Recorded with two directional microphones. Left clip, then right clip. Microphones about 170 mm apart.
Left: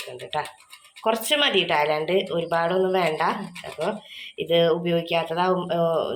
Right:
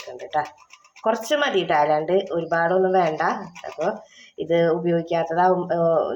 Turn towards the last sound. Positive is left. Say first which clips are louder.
# right 3 dB
turn(degrees=-30)  # may be behind; listen again after turning